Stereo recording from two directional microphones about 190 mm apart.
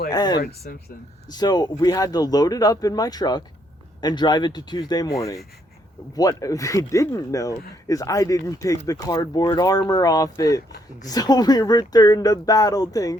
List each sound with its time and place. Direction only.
0.1 s speech: 20° left (ahead or behind)
0.3 s speech: 50° left (ahead or behind)
1.3 s speech: 20° left (ahead or behind)